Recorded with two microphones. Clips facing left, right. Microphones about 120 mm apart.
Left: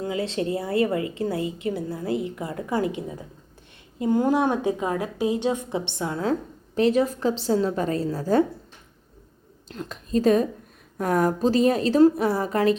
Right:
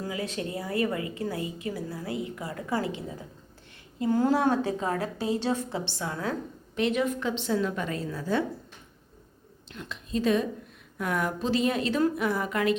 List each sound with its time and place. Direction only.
0.0 s a woman's voice: 25° left (ahead or behind)
6.7 s a woman's voice: 35° left (ahead or behind)
9.6 s a woman's voice: 40° left (ahead or behind)